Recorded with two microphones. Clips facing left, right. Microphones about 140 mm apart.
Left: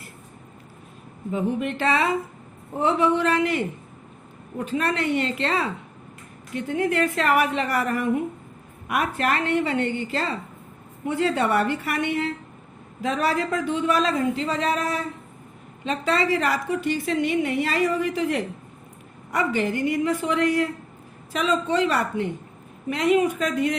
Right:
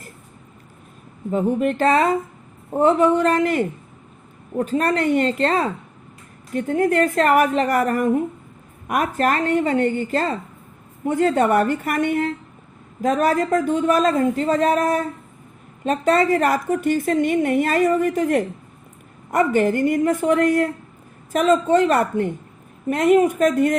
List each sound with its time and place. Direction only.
1.3 s a woman's voice: 45° right (ahead or behind)